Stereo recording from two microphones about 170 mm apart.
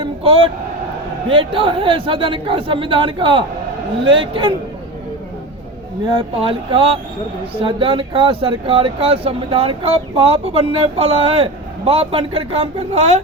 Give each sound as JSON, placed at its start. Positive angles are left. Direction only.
{"t": 0.0, "sound": "a sound", "side_deg": -30}
{"t": 1.3, "sound": "a man's voice", "side_deg": -30}
{"t": 6.1, "sound": "speech", "side_deg": -30}